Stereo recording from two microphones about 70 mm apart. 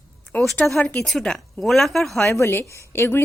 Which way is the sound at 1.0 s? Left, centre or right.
Centre.